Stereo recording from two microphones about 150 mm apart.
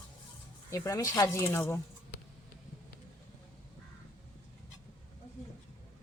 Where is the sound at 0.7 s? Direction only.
20° left (ahead or behind).